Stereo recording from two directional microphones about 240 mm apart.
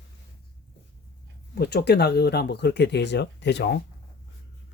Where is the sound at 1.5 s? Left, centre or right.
Left.